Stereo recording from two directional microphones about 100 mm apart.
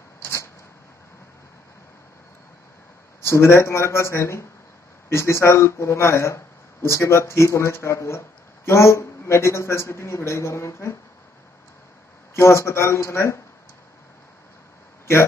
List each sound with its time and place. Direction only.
0.2 s a sound: 30° left (ahead or behind)
3.3 s speech: 25° left (ahead or behind)
12.4 s speech: 30° left (ahead or behind)